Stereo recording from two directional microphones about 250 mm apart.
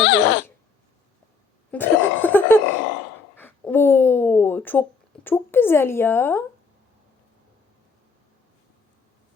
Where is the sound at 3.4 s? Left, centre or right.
Centre.